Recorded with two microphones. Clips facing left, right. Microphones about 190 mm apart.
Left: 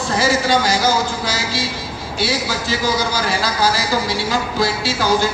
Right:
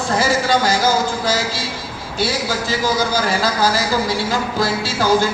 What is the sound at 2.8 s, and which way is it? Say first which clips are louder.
Speech: right 2 dB; 50° right (ahead or behind).